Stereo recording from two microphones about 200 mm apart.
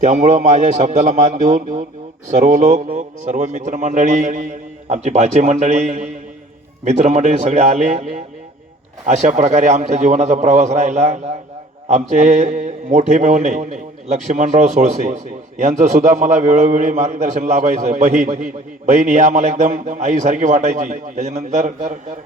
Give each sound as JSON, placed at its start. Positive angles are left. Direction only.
{"t": 0.0, "sound": "a man's voice", "side_deg": -40}